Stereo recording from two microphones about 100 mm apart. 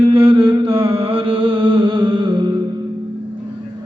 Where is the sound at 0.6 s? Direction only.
65° right (ahead or behind); by 2.5 s 50° right (ahead or behind).